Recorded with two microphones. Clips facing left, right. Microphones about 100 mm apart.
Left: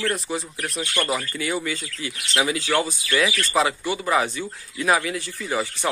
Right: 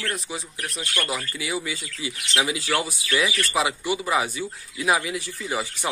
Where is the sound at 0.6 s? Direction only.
35° left (ahead or behind).